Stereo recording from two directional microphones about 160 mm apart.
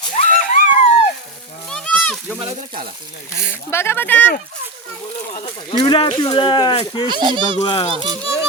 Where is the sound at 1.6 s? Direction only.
5° left (ahead or behind).